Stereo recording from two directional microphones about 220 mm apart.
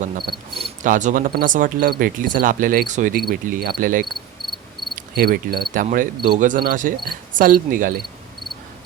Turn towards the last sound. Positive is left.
turn(degrees=-40)  # may be behind; listen again after turning